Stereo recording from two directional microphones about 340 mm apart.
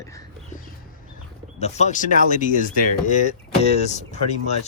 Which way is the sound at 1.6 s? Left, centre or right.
Centre.